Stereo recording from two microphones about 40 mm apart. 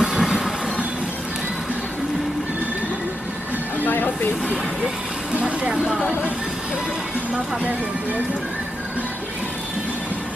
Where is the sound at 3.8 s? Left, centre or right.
Left.